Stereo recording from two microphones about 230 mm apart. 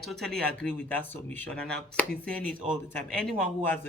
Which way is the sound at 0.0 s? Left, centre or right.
Centre.